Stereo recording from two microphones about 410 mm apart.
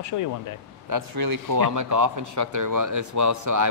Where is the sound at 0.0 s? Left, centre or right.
Left.